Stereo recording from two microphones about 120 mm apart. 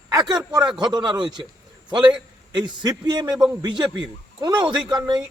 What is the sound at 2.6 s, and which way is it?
Speech, 35° right (ahead or behind).